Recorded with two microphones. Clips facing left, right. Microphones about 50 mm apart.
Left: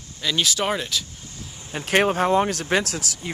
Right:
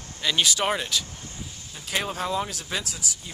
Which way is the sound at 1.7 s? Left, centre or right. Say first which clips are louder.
Left 10 dB; left.